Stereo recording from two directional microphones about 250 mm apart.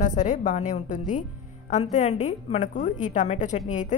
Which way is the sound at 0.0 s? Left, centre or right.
Left.